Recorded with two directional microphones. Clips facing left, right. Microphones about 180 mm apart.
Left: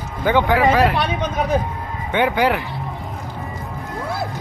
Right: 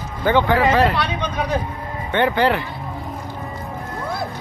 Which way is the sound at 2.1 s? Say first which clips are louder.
Even; 10° left (ahead or behind).